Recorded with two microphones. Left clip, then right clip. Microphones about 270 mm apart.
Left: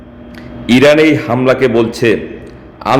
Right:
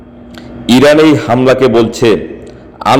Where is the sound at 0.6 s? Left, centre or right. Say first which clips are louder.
Right 2 dB; centre.